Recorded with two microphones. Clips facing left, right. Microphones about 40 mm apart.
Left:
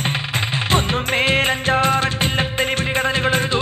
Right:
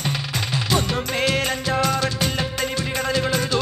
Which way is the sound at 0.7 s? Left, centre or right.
Left.